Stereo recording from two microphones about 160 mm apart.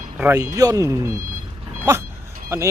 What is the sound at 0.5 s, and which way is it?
Speech, 20° right (ahead or behind).